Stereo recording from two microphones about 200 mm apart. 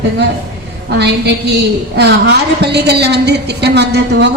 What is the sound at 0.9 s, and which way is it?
Speech, 55° right (ahead or behind).